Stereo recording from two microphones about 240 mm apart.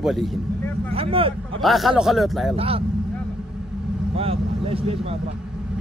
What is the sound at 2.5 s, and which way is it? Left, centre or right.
Speech, right.